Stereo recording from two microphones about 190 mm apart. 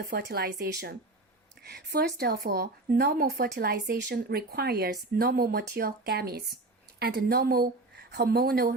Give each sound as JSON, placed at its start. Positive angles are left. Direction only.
{"t": 0.0, "sound": "speech", "side_deg": -60}